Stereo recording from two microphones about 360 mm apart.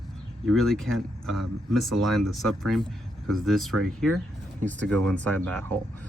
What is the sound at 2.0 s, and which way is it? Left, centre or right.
Speech, right.